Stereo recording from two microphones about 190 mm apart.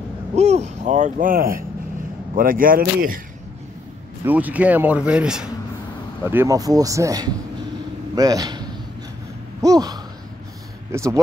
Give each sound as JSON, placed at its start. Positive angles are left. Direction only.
{"t": 0.4, "sound": "a sound", "side_deg": -35}
{"t": 2.3, "sound": "speech", "side_deg": -45}
{"t": 4.2, "sound": "speech", "side_deg": -10}